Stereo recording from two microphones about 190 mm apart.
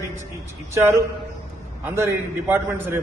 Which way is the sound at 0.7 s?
15° right (ahead or behind).